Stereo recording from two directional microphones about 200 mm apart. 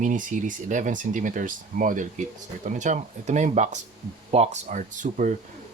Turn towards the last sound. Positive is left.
turn(degrees=-40)  # may be behind; listen again after turning